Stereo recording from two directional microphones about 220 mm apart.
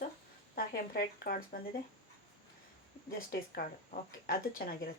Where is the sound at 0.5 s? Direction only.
45° left (ahead or behind).